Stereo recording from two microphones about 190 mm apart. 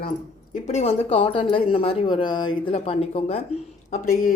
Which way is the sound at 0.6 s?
35° left (ahead or behind).